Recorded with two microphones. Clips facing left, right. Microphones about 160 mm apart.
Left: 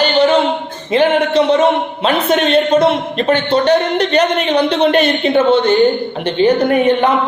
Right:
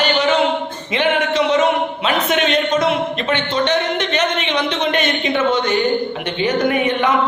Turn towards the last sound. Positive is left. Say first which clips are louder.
# left 5 dB
turn(degrees=35)  # may be behind; listen again after turning